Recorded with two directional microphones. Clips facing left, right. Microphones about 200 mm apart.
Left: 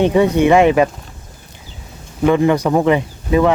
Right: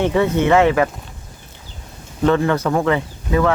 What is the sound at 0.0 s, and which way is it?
Speech, 15° left (ahead or behind).